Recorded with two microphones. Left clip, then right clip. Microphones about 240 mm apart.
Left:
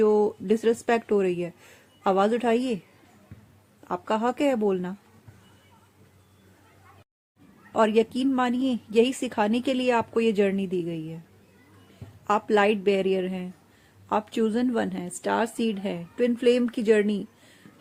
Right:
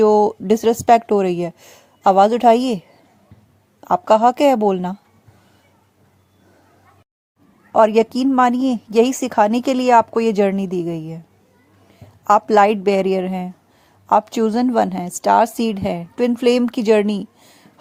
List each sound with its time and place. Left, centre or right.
0.0 s a woman's voice: right
3.8 s a woman's voice: right
7.7 s a woman's voice: right
12.2 s a woman's voice: right